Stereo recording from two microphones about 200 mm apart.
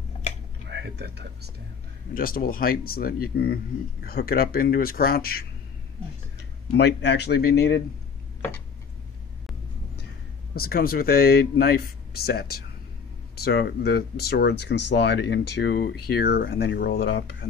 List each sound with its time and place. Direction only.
0.7 s speech: 60° right (ahead or behind)
2.1 s speech: 45° left (ahead or behind)
6.8 s speech: 60° left (ahead or behind)
10.5 s speech: 50° left (ahead or behind)